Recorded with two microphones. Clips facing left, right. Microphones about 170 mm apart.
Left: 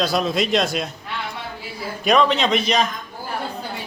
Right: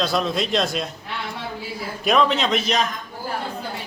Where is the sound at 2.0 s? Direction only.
Centre (ahead or behind).